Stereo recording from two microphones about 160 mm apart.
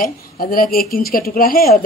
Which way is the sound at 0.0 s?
65° left (ahead or behind).